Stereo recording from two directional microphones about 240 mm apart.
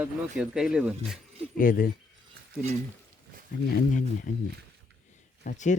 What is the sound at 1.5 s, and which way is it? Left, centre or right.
Speech, left.